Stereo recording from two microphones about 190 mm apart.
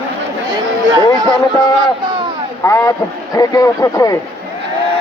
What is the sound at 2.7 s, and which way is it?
A man's voice, 15° left (ahead or behind).